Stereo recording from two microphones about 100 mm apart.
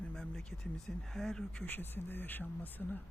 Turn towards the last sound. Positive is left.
turn(degrees=20)  # may be behind; listen again after turning